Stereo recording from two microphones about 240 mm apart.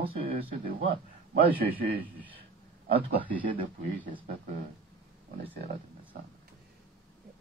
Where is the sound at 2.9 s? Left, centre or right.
Right.